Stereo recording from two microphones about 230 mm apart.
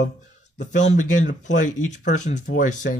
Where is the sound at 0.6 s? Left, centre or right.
Left.